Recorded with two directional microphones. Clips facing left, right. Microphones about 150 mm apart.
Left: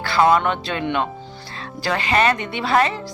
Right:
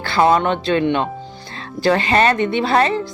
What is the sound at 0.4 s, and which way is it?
Speech, 25° right (ahead or behind).